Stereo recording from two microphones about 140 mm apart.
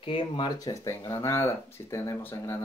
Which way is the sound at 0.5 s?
25° left (ahead or behind).